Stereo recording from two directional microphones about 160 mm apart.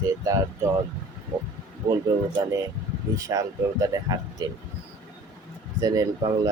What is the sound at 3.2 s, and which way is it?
Speech, 20° right (ahead or behind).